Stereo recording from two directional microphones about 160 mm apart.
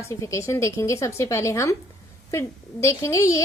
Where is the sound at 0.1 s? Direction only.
20° left (ahead or behind).